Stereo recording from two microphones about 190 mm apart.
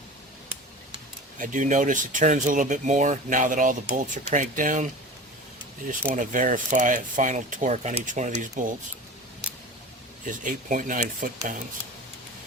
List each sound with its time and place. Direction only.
1.4 s speech: 40° right (ahead or behind)
6.1 s speech: 45° right (ahead or behind)
10.2 s speech: 45° right (ahead or behind)